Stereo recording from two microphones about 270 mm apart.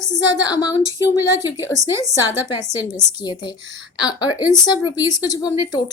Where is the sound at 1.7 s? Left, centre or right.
Centre.